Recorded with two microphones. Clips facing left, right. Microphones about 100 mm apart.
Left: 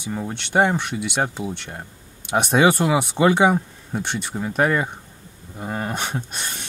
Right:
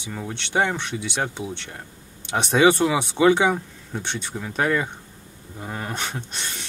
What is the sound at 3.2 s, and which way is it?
Speech, 30° left (ahead or behind).